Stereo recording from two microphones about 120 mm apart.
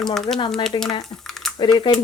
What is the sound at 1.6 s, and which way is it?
Speech, 40° left (ahead or behind).